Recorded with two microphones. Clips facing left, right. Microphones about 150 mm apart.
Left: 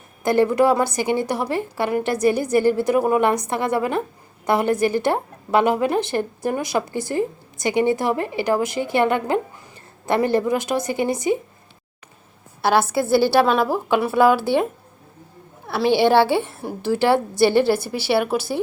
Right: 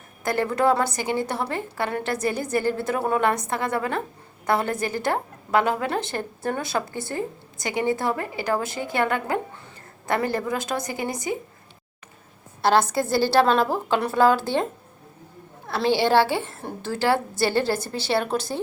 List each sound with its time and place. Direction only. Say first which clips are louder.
0.2 s a woman's voice: left 6 dB; 20° left (ahead or behind)
12.6 s a woman's voice: left 2 dB; 5° left (ahead or behind)